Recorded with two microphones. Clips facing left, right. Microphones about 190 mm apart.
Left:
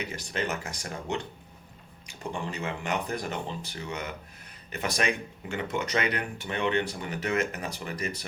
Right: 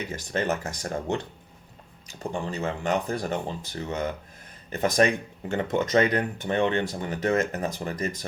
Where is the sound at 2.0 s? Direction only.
40° right (ahead or behind).